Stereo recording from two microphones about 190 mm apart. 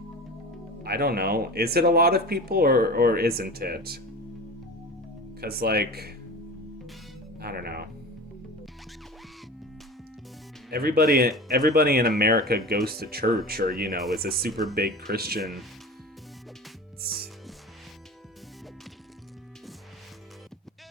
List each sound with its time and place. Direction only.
0.8 s speech: 55° right (ahead or behind)
5.4 s speech: 55° right (ahead or behind)
7.3 s speech: 55° right (ahead or behind)
10.7 s speech: 55° right (ahead or behind)
17.0 s music: 55° right (ahead or behind)